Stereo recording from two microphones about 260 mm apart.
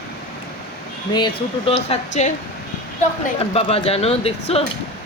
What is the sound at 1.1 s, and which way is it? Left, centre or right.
Speech, centre.